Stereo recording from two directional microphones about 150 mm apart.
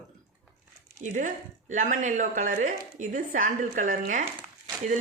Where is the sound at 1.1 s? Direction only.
55° right (ahead or behind).